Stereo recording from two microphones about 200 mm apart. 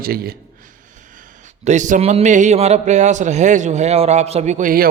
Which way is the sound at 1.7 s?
40° right (ahead or behind).